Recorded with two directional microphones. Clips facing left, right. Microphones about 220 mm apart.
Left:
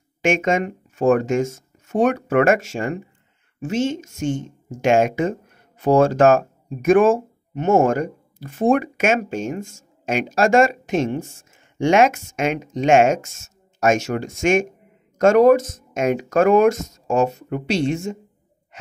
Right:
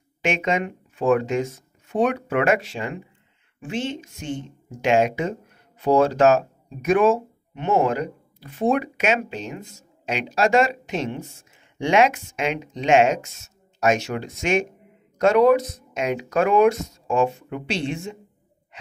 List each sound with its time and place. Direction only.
0.2 s speech: 45° left (ahead or behind)